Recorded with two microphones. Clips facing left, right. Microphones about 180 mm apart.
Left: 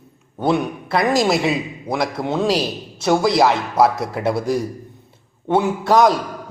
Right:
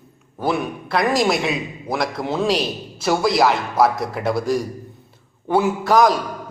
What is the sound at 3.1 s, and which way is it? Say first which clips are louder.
Speech: left 2 dB; 25° left (ahead or behind).